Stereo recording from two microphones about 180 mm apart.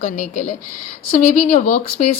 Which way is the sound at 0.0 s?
45° left (ahead or behind).